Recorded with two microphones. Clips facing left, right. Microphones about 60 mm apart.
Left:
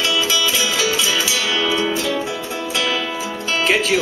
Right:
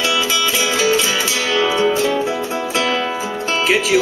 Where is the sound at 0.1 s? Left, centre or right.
Right.